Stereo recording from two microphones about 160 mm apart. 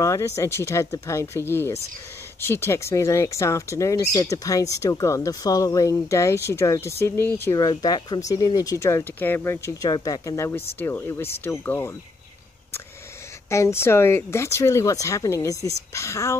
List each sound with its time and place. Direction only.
0.0 s speech: 20° left (ahead or behind)
7.5 s speech: 25° left (ahead or behind)
9.8 s speech: 25° left (ahead or behind)
13.5 s speech: 15° left (ahead or behind)